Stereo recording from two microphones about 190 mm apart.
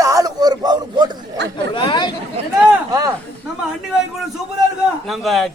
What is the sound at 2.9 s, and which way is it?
Speech, 20° right (ahead or behind).